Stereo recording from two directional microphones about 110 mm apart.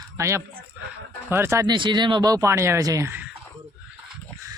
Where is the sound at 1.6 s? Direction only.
45° right (ahead or behind); by 3.1 s 30° right (ahead or behind).